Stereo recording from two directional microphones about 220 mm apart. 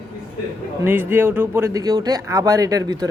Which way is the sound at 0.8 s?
10° right (ahead or behind).